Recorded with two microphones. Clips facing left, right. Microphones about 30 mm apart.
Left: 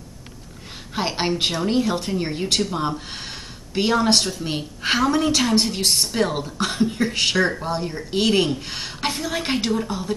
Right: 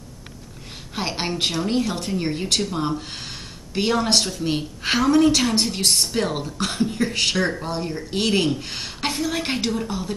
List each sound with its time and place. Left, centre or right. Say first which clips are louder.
0.9 s speech: left 3 dB; centre